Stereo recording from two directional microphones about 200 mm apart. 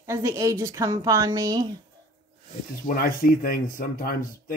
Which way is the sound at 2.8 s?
45° left (ahead or behind).